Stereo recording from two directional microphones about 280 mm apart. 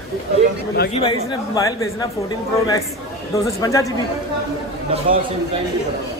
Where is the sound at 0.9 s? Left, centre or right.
Centre.